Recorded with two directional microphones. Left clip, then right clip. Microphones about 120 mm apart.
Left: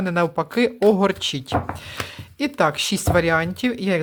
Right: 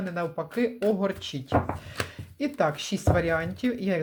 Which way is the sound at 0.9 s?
75° left (ahead or behind).